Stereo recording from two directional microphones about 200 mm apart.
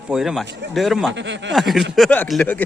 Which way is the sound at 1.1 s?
65° right (ahead or behind).